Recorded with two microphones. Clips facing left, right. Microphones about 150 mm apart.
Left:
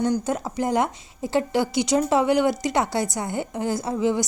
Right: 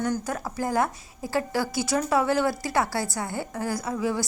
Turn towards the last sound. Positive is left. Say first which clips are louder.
# left 4 dB
turn(degrees=20)  # may be behind; listen again after turning